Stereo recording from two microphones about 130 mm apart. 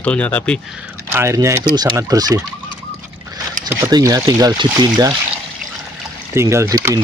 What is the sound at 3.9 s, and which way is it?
Speech, 25° right (ahead or behind).